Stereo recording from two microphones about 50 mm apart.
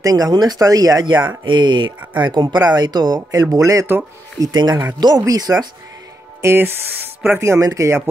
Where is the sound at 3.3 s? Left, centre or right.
Right.